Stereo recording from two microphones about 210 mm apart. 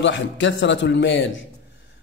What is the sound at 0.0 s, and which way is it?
A man's voice, 60° left (ahead or behind).